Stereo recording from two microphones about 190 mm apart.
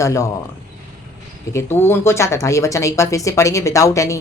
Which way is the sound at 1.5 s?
10° left (ahead or behind).